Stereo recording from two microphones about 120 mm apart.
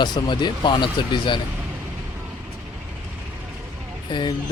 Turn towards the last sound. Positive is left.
turn(degrees=40)  # may be behind; listen again after turning